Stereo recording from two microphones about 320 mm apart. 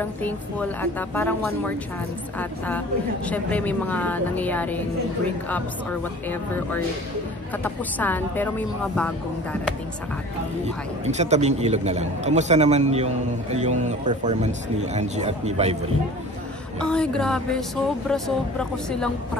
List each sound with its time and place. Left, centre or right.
0.0 s speech: centre
3.3 s speech: centre
7.6 s speech: centre
11.1 s a man's voice: right
16.8 s speech: centre